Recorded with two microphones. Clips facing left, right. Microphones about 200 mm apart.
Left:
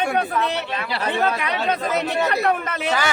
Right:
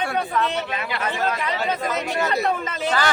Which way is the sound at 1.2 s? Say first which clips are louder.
Left 1 dB; 65° left (ahead or behind).